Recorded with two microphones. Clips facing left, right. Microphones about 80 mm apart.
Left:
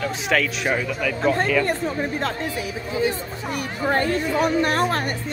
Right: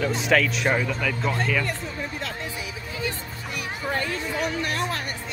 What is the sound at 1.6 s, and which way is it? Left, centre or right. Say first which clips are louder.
Chatter: left 7 dB; left.